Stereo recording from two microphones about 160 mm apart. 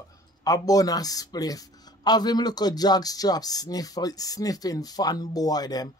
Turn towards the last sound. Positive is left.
turn(degrees=25)  # may be behind; listen again after turning